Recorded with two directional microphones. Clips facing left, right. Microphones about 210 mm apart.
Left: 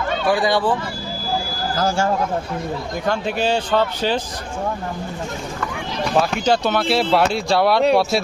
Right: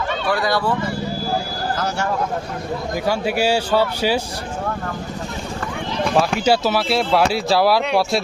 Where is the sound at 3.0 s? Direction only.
10° right (ahead or behind).